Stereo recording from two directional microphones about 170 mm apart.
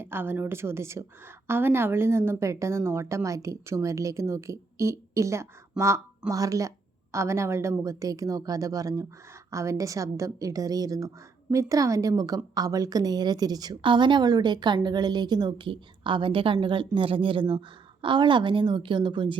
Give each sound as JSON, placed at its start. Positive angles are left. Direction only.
{"t": 0.0, "sound": "a woman's voice", "side_deg": -15}